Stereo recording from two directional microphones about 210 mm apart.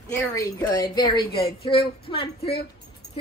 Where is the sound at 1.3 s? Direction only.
45° left (ahead or behind).